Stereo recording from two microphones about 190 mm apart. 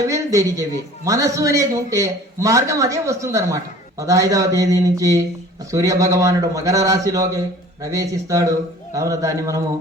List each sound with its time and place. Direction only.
0.1 s a man's voice: 15° right (ahead or behind)